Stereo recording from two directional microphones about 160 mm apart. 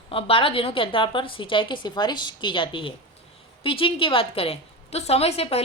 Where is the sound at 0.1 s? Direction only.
35° left (ahead or behind).